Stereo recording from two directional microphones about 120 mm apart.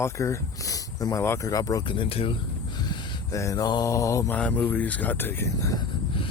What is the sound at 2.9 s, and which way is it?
Mantra, 30° left (ahead or behind).